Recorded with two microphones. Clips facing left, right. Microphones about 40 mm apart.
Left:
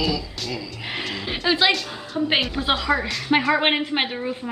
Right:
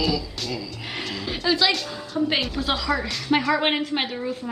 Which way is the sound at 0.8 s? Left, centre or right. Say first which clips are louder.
Left 2 dB; centre.